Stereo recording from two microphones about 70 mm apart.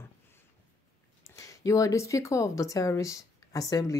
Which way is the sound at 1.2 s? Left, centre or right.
Left.